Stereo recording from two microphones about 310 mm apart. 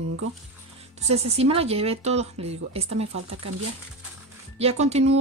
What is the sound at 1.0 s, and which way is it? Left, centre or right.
Speech, centre.